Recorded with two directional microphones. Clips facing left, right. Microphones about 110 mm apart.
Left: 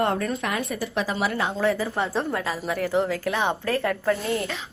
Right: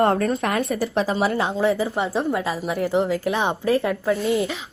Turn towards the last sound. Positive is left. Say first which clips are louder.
# right 4 dB
turn(degrees=-15)  # may be behind; listen again after turning